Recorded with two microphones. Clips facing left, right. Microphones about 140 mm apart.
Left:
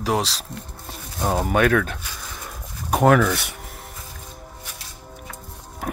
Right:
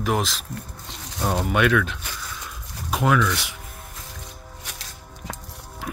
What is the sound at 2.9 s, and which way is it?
Music, 60° left (ahead or behind).